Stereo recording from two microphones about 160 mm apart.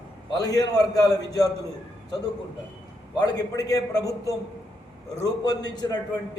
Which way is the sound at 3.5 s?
20° left (ahead or behind).